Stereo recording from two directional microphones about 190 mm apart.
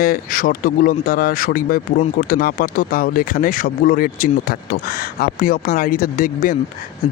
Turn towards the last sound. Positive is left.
turn(degrees=45)  # may be behind; listen again after turning